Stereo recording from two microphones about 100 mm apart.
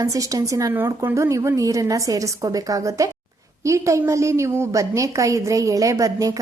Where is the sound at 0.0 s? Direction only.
35° right (ahead or behind).